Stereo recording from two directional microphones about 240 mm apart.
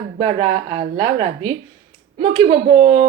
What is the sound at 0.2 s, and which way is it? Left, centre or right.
Speech, right.